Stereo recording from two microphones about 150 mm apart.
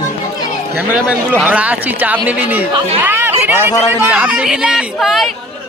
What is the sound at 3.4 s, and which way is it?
A man's voice, 15° right (ahead or behind).